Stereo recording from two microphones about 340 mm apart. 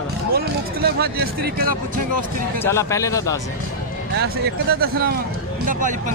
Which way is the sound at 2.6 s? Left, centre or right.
Centre.